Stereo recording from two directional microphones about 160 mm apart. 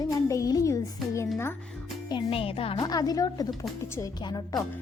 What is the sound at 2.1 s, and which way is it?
Speech, 30° left (ahead or behind).